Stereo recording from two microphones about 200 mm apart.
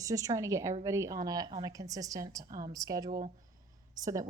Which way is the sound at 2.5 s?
45° right (ahead or behind).